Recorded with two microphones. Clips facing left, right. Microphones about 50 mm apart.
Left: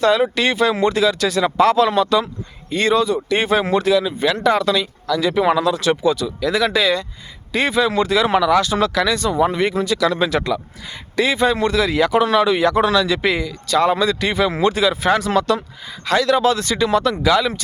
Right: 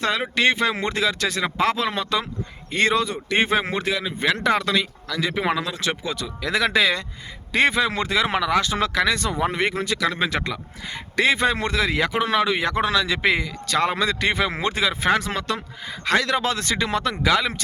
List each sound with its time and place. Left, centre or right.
0.3 s a man's voice: right
2.6 s a man's voice: right
5.3 s a man's voice: right